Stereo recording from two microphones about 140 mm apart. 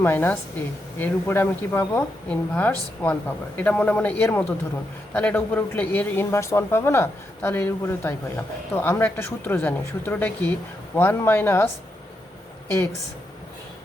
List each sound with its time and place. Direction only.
0.0 s speech: 15° left (ahead or behind)